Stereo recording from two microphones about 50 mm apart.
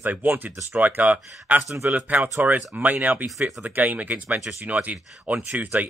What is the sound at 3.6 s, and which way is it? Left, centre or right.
Speech, right.